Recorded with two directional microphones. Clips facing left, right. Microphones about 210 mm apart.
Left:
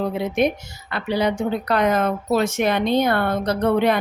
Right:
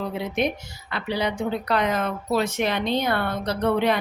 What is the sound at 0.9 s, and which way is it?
A woman's voice, 50° left (ahead or behind).